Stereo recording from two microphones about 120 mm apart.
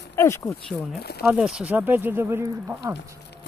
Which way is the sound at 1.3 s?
5° right (ahead or behind).